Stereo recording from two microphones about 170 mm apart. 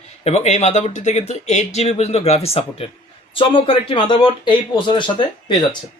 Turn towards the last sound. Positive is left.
turn(degrees=30)  # may be behind; listen again after turning